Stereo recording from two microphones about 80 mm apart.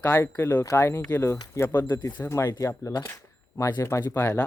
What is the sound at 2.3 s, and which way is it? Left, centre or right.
Speech, left.